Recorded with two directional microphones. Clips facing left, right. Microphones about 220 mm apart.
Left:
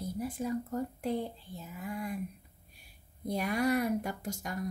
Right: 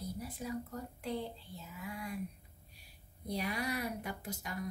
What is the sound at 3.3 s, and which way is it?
A woman's voice, 50° left (ahead or behind).